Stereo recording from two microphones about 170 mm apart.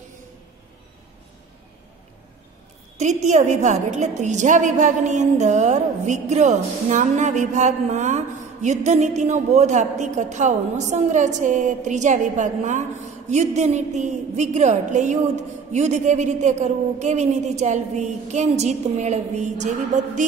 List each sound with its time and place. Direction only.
3.0 s a woman's voice: 45° right (ahead or behind)